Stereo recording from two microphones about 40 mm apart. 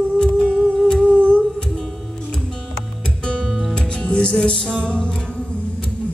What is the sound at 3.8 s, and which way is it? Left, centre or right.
Music, left.